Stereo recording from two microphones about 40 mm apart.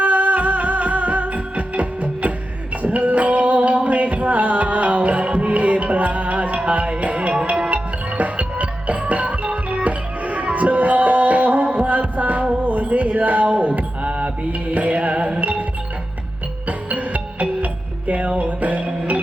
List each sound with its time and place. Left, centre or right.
0.0 s music: right
12.6 s mantra: right
14.7 s music: right
16.6 s music: right